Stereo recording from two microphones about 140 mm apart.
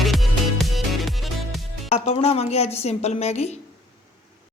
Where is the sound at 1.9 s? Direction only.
45° left (ahead or behind).